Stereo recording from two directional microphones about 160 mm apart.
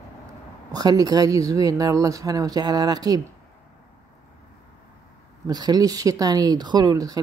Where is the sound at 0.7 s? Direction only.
25° right (ahead or behind).